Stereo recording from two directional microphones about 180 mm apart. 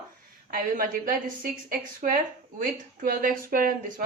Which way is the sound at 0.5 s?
50° right (ahead or behind).